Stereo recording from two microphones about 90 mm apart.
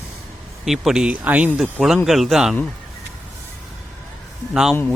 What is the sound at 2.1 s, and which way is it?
Speech, centre (ahead or behind).